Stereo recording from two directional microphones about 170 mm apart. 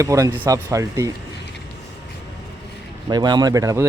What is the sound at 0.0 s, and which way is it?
Speech, 20° right (ahead or behind).